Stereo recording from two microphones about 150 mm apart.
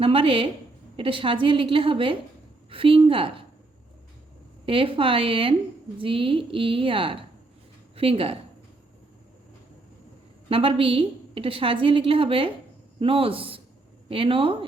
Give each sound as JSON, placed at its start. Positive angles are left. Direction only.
{"t": 0.0, "sound": "a woman's voice", "side_deg": -35}
{"t": 4.6, "sound": "a woman's voice", "side_deg": -35}
{"t": 10.5, "sound": "a woman's voice", "side_deg": -35}